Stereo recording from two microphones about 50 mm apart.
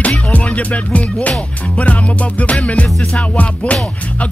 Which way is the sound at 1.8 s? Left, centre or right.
Left.